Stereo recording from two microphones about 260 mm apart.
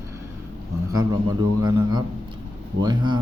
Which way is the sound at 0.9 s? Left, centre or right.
Centre.